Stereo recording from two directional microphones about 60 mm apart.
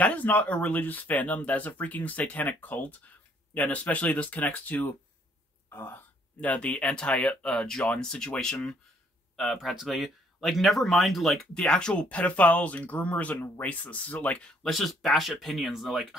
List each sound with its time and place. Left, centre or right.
0.0 s speech: left
5.7 s a sound: left
6.5 s speech: left
9.4 s speech: centre
11.5 s speech: centre
14.6 s speech: centre